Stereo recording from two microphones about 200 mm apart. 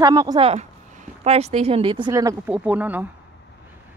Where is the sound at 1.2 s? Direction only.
30° right (ahead or behind); by 3.0 s 10° right (ahead or behind).